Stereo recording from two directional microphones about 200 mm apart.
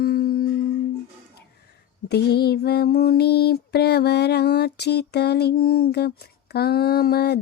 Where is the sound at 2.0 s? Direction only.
55° left (ahead or behind).